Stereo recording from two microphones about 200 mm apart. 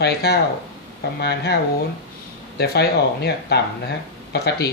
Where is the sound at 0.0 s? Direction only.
55° left (ahead or behind).